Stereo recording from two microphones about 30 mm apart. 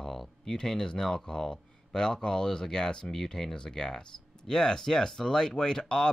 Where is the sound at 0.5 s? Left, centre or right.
Centre.